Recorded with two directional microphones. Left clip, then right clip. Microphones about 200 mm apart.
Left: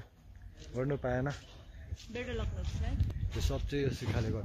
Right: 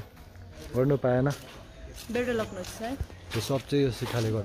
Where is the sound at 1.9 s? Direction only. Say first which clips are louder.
Right 11 dB; 50° right (ahead or behind).